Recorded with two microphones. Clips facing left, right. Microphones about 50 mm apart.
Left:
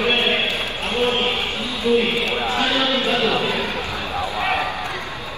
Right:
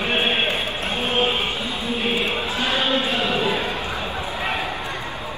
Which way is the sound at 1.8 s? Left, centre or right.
Left.